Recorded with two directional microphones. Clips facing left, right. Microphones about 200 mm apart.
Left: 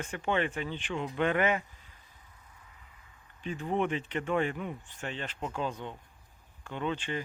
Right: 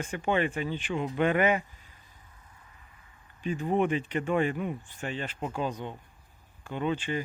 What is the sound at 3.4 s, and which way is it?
Speech, 10° right (ahead or behind).